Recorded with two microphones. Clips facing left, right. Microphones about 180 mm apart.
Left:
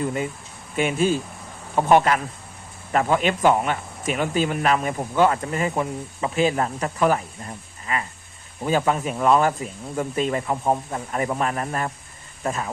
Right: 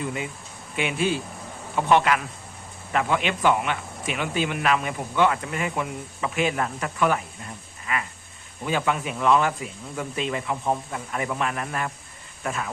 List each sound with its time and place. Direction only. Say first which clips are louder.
0.0 s speech: left 5 dB; 45° left (ahead or behind)